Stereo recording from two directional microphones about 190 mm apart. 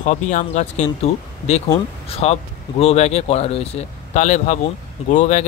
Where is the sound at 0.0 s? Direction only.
40° left (ahead or behind).